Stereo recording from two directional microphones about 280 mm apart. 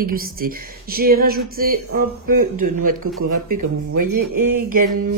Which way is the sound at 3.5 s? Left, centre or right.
Right.